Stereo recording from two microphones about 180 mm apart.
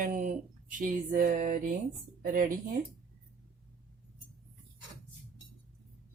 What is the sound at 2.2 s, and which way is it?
Speech, 50° right (ahead or behind).